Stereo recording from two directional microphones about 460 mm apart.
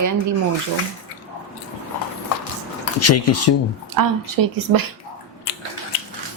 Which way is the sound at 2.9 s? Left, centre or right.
Left.